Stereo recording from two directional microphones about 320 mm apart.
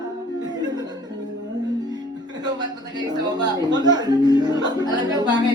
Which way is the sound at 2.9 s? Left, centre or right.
Centre.